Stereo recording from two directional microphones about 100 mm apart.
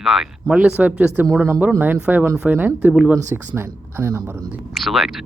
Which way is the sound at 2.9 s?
5° right (ahead or behind).